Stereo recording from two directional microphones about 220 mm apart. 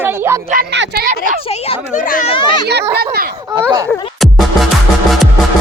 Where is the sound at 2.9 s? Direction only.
45° right (ahead or behind).